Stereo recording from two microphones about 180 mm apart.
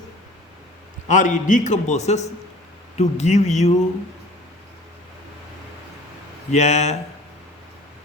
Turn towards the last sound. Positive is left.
turn(degrees=40)  # may be behind; listen again after turning